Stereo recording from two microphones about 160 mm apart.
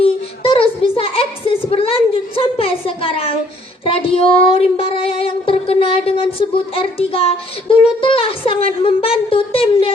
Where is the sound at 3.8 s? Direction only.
35° left (ahead or behind).